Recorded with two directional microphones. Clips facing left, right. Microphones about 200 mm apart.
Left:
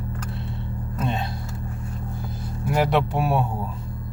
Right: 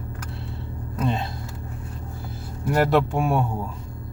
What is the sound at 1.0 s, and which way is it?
Speech, centre (ahead or behind).